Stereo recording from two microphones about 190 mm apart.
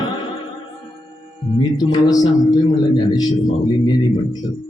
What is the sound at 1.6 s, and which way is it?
Mantra, 25° left (ahead or behind).